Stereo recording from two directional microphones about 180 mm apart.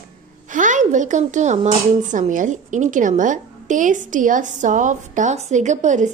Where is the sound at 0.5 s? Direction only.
45° right (ahead or behind).